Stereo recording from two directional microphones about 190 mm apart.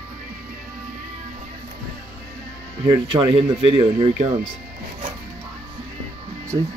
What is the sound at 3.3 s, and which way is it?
Speech, 30° right (ahead or behind).